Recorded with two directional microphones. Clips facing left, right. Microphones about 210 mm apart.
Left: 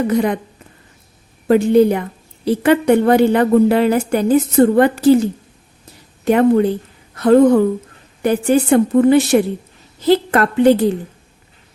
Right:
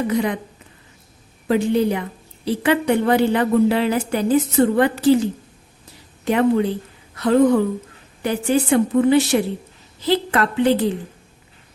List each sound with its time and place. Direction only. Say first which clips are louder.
0.1 s a woman's voice: left 4 dB; 50° left (ahead or behind)
1.5 s a woman's voice: left 6 dB; 50° left (ahead or behind)
6.2 s a woman's voice: left 5 dB; 50° left (ahead or behind)